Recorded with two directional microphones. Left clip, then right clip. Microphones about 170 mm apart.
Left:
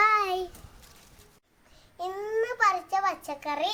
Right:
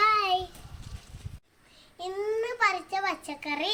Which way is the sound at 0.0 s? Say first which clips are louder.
Even; 20° left (ahead or behind).